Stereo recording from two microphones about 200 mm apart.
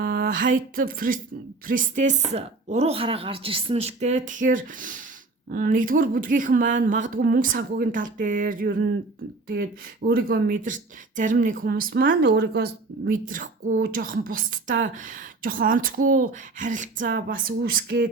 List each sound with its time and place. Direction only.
0.0 s a woman's voice: 45° right (ahead or behind)
10.1 s speech: 45° right (ahead or behind)